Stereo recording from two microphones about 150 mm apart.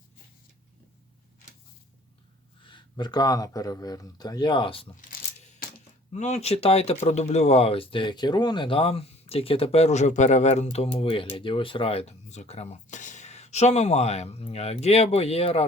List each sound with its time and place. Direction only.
2.6 s speech: 30° left (ahead or behind)
6.1 s speech: 50° left (ahead or behind)